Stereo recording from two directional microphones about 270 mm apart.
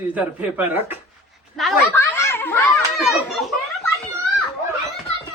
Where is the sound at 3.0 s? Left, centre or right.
Centre.